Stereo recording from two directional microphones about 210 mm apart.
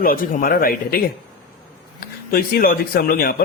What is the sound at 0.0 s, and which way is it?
A man's voice, 45° left (ahead or behind).